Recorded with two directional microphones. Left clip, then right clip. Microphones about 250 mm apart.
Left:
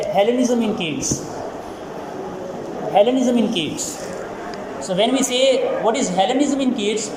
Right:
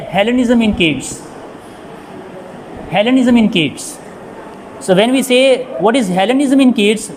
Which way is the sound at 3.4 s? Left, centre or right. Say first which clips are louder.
Right 7 dB; right.